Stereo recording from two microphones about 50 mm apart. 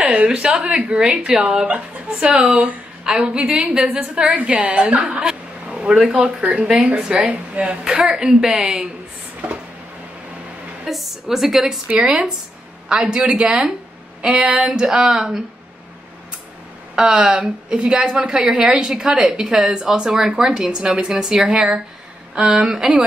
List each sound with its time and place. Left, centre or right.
0.0 s a woman's voice: right
5.2 s vehicle: centre
6.4 s a woman's voice: right
7.8 s a woman's voice: centre
10.9 s a woman's voice: centre
12.0 s a woman's voice: right
14.4 s a woman's voice: centre
16.9 s a woman's voice: centre